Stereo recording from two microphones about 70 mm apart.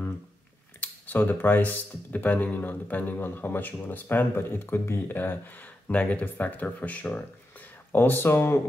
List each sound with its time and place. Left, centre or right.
0.7 s speech: left
7.9 s speech: left